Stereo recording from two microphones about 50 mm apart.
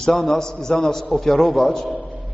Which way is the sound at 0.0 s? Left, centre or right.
Centre.